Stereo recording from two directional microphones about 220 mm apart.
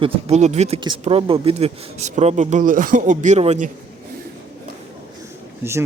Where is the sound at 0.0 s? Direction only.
30° right (ahead or behind).